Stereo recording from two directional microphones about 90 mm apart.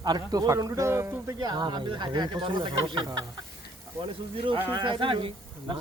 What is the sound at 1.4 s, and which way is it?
Speech, 55° right (ahead or behind).